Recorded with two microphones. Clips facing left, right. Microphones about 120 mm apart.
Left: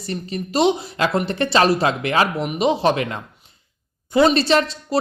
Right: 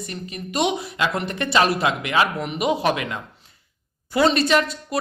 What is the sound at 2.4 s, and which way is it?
A woman's voice, 25° left (ahead or behind).